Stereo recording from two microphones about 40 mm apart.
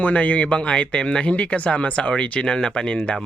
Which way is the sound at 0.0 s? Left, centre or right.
Left.